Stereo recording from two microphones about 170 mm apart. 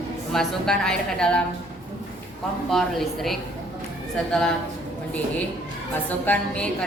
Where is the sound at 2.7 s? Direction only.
Centre (ahead or behind).